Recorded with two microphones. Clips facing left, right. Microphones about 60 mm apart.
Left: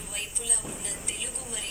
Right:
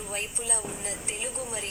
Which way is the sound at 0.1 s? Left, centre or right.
Right.